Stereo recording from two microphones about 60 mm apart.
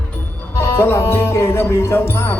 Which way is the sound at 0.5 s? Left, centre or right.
Left.